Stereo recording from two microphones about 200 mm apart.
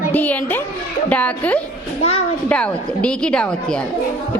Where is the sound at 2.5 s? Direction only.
5° left (ahead or behind).